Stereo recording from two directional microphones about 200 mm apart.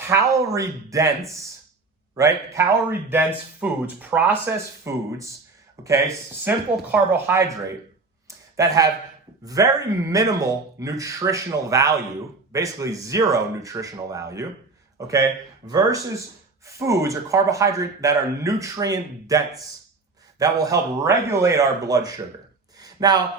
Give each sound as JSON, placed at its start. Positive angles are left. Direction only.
{"t": 0.1, "sound": "a man's voice", "side_deg": -15}
{"t": 20.4, "sound": "a man's voice", "side_deg": -15}
{"t": 22.8, "sound": "a sound", "side_deg": -20}